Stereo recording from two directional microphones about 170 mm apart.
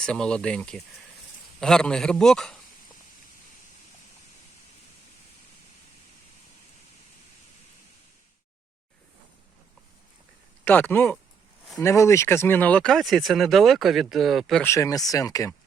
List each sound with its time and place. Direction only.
0.0 s speech: 5° left (ahead or behind)
10.6 s speech: 10° left (ahead or behind)
14.6 s speech: 15° left (ahead or behind)